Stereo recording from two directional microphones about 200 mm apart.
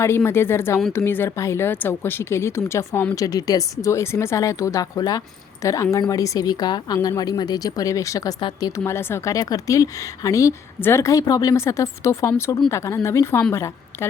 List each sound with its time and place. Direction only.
0.0 s a woman's voice: 10° left (ahead or behind)